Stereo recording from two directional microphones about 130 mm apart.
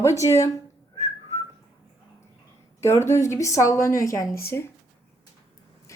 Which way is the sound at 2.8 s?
20° left (ahead or behind).